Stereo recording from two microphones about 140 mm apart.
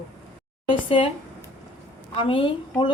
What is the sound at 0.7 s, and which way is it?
Speech, 40° left (ahead or behind).